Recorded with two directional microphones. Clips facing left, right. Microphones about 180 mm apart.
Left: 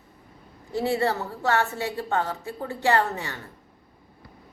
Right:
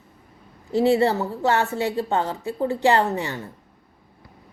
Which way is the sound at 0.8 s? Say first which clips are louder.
Right 6 dB; 25° right (ahead or behind).